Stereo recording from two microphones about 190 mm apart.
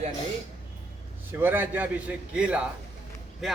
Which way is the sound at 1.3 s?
10° right (ahead or behind).